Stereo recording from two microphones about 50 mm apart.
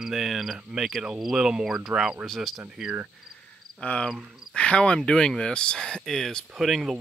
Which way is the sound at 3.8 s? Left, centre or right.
Left.